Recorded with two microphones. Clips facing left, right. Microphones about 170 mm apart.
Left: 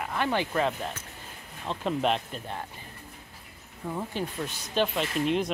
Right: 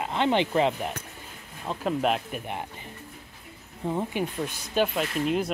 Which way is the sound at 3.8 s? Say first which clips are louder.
Right 4 dB; 25° right (ahead or behind).